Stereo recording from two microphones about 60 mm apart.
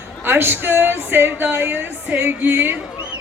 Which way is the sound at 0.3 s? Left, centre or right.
Right.